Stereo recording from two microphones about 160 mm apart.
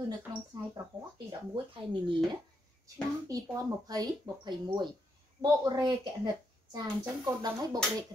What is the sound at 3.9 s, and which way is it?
Speech, 25° right (ahead or behind).